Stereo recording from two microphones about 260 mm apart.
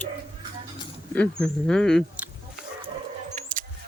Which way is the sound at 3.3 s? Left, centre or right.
Right.